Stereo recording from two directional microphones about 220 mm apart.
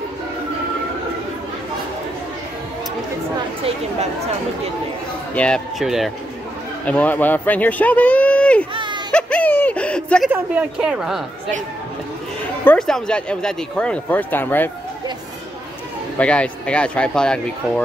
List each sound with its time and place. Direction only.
5.3 s speech: 5° left (ahead or behind)
8.7 s a sound: 20° right (ahead or behind)
9.1 s a sound: 5° left (ahead or behind)
10.3 s speech: 5° right (ahead or behind)
12.6 s speech: 5° left (ahead or behind)
16.2 s speech: 5° left (ahead or behind)